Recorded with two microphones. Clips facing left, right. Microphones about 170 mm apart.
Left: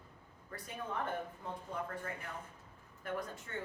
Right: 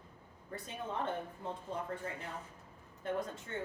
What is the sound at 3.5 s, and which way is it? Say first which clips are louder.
Speech: right 3 dB; 25° right (ahead or behind).